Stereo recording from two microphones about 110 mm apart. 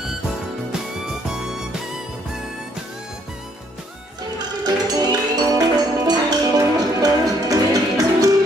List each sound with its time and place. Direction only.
1.3 s music: 5° right (ahead or behind)
4.4 s music: 40° right (ahead or behind)